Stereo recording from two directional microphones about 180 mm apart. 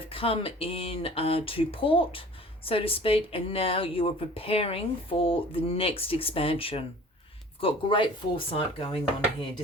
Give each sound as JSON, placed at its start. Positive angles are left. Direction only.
{"t": 0.1, "sound": "speech", "side_deg": 30}